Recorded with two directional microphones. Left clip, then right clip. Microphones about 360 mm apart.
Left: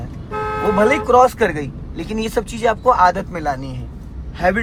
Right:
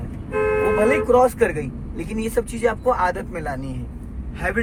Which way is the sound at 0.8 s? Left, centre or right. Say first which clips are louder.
Left 5 dB; centre.